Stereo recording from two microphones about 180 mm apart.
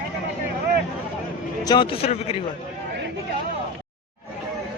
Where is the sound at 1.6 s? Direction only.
25° left (ahead or behind).